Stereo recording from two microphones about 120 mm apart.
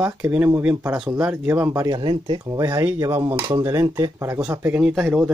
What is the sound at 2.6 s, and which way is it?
Speech, 25° right (ahead or behind).